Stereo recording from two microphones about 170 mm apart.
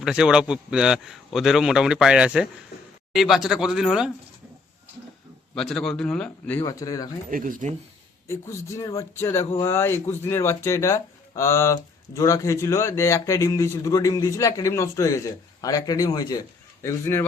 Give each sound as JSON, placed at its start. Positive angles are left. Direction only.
{"t": 0.0, "sound": "speech", "side_deg": -5}
{"t": 5.5, "sound": "speech", "side_deg": 5}
{"t": 6.7, "sound": "speech", "side_deg": 20}
{"t": 7.3, "sound": "speech", "side_deg": -55}
{"t": 8.3, "sound": "speech", "side_deg": 15}